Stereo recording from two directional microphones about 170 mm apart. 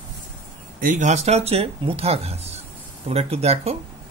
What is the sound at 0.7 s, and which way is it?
Speech, 50° right (ahead or behind).